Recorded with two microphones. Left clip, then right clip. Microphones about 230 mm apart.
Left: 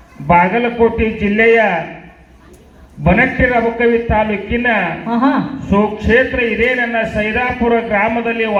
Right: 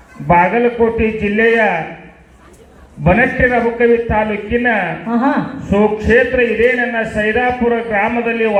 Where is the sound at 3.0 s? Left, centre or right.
Left.